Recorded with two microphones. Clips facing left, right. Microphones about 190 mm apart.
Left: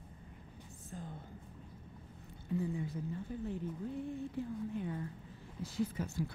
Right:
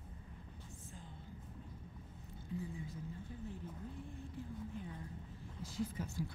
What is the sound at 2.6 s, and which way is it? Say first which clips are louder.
Speech: left 10 dB; 65° left (ahead or behind).